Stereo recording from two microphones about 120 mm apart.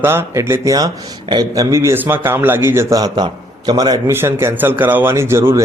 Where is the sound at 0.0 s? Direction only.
20° right (ahead or behind); by 1.6 s 35° right (ahead or behind).